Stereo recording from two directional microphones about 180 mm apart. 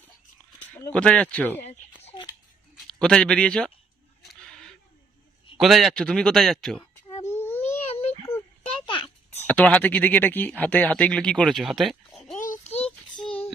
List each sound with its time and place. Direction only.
0.8 s speech: 10° left (ahead or behind)
1.6 s a sound: 35° left (ahead or behind)
3.0 s speech: 5° left (ahead or behind)
4.2 s a sound: centre (ahead or behind)
5.5 s speech: centre (ahead or behind)
7.3 s baby cry: 10° left (ahead or behind)
7.9 s a sound: 35° left (ahead or behind)
9.5 s speech: 5° left (ahead or behind)
12.4 s child singing: 40° left (ahead or behind)